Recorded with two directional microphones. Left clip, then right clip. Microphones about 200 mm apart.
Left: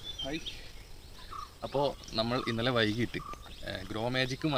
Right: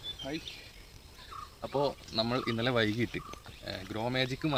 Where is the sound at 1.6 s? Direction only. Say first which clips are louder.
Even; centre (ahead or behind).